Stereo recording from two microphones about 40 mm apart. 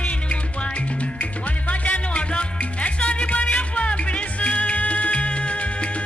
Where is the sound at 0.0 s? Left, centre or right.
Left.